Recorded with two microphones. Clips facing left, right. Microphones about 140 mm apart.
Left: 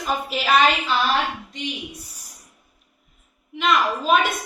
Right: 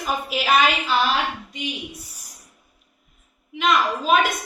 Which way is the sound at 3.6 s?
Centre (ahead or behind).